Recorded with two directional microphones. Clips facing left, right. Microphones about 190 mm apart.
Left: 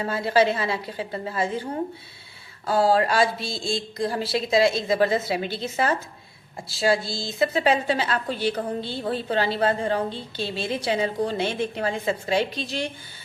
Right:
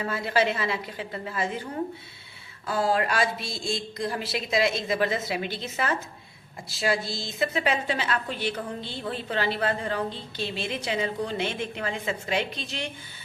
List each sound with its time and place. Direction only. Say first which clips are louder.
0.0 s a woman's voice: left 4 dB; 30° left (ahead or behind)
2.6 s a woman's voice: left 5 dB; 35° left (ahead or behind)